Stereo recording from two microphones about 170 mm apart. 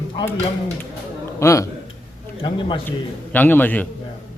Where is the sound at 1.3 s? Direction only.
15° left (ahead or behind).